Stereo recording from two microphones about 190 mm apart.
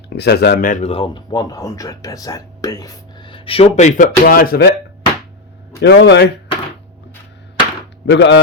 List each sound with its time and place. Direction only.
0.2 s speech: 60° left (ahead or behind)
5.8 s a man's voice: 70° left (ahead or behind)
8.0 s a man's voice: 70° left (ahead or behind)